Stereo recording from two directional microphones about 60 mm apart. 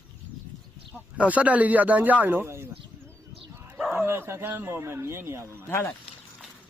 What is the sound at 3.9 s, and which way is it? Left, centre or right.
Speech, right.